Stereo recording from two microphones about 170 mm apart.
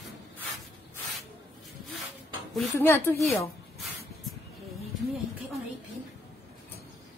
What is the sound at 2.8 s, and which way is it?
Speech, 15° left (ahead or behind).